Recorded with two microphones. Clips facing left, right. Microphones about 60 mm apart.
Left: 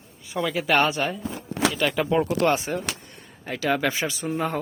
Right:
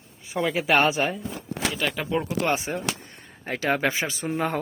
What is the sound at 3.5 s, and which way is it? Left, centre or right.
Speech, right.